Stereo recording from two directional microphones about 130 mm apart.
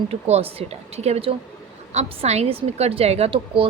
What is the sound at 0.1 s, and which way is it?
A woman's voice, 50° right (ahead or behind).